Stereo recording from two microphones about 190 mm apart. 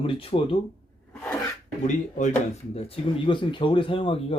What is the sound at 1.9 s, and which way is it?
Speech, 40° left (ahead or behind).